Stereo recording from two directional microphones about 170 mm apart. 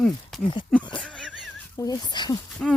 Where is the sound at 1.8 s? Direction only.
20° left (ahead or behind).